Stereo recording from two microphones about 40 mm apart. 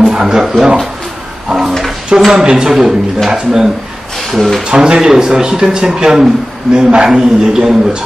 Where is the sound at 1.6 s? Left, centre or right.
Centre.